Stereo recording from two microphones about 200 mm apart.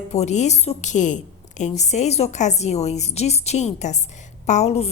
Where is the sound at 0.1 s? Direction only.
35° left (ahead or behind).